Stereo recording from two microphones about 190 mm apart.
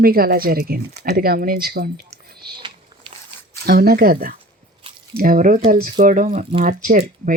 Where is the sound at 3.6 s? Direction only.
55° right (ahead or behind).